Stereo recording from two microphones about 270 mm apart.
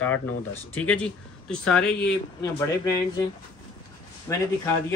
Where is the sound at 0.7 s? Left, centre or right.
Centre.